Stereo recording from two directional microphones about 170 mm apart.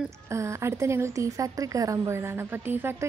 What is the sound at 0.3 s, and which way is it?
A woman's voice, 15° right (ahead or behind).